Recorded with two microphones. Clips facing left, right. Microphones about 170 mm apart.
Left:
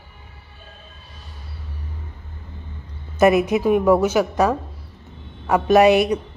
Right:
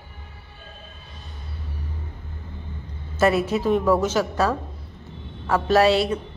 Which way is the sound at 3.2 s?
15° left (ahead or behind).